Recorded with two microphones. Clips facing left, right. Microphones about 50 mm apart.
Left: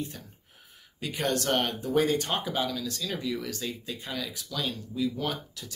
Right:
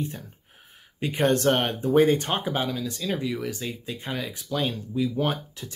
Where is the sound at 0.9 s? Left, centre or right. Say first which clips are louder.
Right 6 dB; right.